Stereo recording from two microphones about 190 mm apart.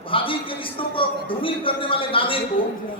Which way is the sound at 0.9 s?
25° left (ahead or behind).